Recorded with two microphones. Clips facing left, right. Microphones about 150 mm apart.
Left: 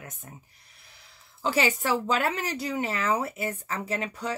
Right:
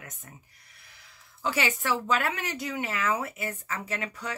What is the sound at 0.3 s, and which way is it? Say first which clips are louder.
Speech: left 3 dB; 30° left (ahead or behind).